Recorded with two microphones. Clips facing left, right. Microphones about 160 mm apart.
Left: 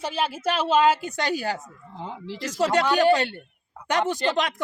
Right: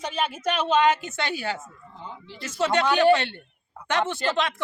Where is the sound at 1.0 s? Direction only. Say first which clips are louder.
Left 3 dB; 40° left (ahead or behind).